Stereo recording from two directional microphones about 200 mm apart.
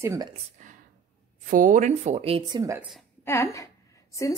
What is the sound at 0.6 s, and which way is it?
Whispering, 40° right (ahead or behind).